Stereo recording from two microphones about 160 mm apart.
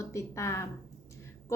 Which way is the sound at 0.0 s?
20° left (ahead or behind).